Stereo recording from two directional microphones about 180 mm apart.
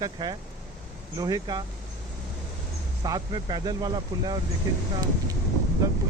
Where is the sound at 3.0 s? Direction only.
20° right (ahead or behind).